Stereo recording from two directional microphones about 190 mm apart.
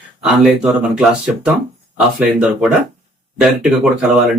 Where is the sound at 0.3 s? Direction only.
Centre (ahead or behind).